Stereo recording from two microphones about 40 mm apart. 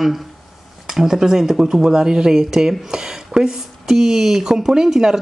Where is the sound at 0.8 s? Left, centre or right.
Centre.